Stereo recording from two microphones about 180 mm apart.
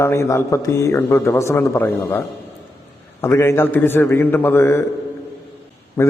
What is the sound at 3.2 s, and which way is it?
A man's voice, 15° left (ahead or behind).